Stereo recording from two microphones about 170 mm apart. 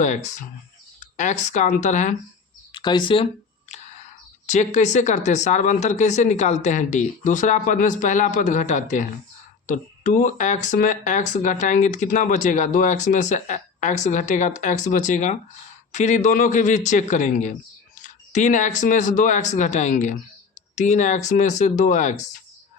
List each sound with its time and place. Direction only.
0.9 s speech: 45° left (ahead or behind)
2.7 s speech: 25° left (ahead or behind)
4.4 s speech: 45° left (ahead or behind)